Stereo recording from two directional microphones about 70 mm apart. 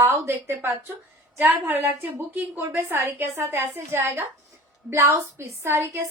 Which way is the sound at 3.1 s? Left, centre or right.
Right.